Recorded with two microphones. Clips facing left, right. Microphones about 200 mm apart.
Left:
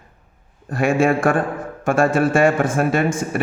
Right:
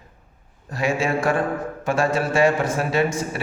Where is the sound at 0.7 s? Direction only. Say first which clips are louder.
Left 5 dB; 55° left (ahead or behind).